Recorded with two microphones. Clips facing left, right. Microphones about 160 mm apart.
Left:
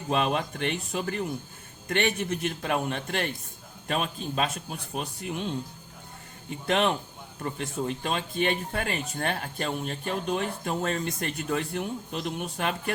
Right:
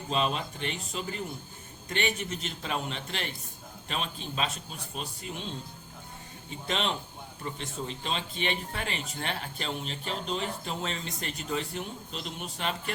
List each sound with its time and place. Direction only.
0.1 s a man's voice: 60° left (ahead or behind)
6.7 s a man's voice: 60° left (ahead or behind)